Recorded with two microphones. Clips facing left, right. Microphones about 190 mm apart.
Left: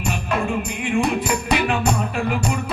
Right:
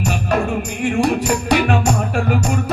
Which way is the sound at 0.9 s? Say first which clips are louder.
Right 4 dB; 45° right (ahead or behind).